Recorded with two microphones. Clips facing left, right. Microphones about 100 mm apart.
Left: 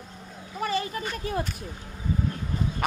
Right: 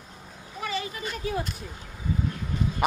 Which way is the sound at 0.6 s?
45° left (ahead or behind).